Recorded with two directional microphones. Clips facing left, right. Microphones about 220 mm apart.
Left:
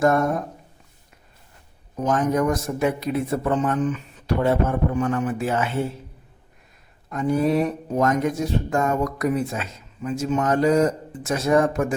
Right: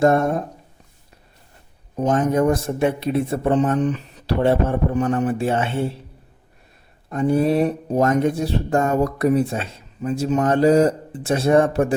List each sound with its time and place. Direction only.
0.0 s speech: 25° right (ahead or behind)
2.0 s speech: 25° right (ahead or behind)
7.1 s speech: 30° right (ahead or behind)